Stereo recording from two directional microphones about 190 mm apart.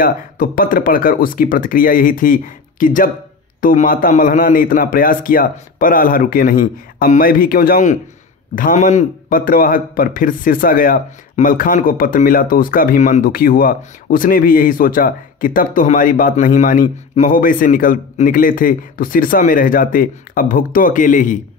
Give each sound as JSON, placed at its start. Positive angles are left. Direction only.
{"t": 0.0, "sound": "a man's voice", "side_deg": 50}